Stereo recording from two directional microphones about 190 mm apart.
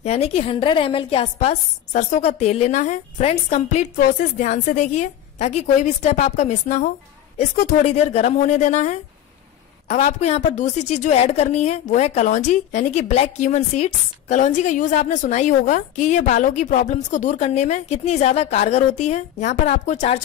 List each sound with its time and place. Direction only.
0.0 s a woman's voice: 35° left (ahead or behind)